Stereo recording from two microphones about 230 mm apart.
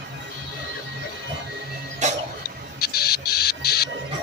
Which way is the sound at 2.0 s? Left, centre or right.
Right.